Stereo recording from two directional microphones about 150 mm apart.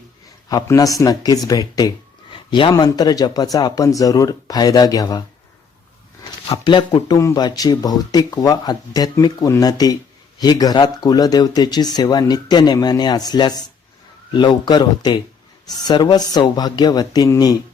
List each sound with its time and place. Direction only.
0.5 s speech: 25° left (ahead or behind)
6.5 s speech: 30° left (ahead or behind)